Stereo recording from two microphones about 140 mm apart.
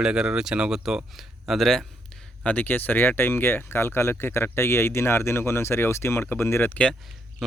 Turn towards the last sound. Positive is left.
turn(degrees=5)  # may be behind; listen again after turning